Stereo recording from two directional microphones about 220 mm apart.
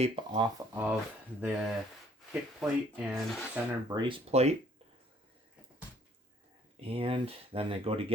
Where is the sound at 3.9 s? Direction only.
20° right (ahead or behind).